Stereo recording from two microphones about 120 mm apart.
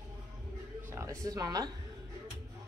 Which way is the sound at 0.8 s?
25° right (ahead or behind).